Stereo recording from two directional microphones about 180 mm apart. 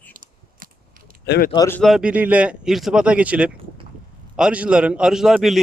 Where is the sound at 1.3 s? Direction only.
55° left (ahead or behind).